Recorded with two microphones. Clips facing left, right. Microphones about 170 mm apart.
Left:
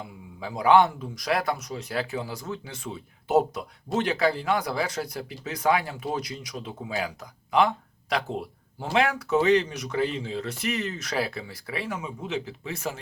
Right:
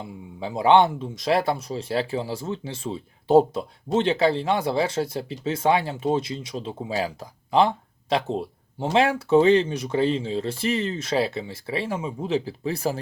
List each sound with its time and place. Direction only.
0.0 s speech: 25° right (ahead or behind)